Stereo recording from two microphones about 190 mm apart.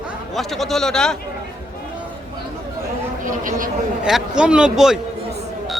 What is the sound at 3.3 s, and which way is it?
Vehicle, 45° right (ahead or behind).